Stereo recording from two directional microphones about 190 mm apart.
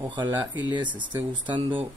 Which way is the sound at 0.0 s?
25° right (ahead or behind).